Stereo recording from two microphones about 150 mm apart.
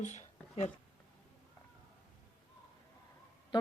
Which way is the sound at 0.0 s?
50° left (ahead or behind).